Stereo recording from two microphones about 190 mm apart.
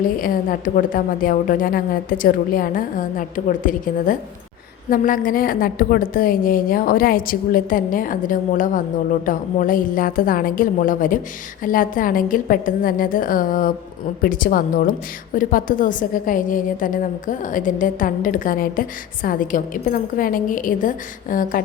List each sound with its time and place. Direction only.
0.2 s a woman's voice: 45° left (ahead or behind)